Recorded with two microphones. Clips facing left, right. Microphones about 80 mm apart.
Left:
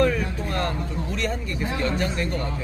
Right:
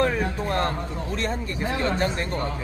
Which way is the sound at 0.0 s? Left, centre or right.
Right.